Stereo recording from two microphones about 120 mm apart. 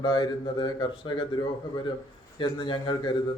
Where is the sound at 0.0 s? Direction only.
35° left (ahead or behind).